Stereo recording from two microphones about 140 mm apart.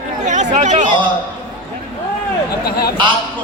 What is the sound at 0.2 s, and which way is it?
Chatter, 60° right (ahead or behind).